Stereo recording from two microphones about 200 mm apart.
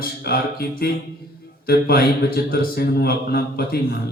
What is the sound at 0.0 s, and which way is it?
A man's voice, 50° left (ahead or behind).